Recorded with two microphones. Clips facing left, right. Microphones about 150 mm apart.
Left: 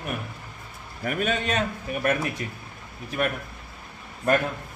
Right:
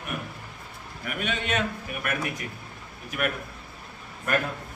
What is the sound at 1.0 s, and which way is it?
A man's voice, 40° left (ahead or behind).